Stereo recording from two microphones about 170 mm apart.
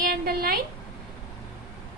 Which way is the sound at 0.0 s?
60° right (ahead or behind).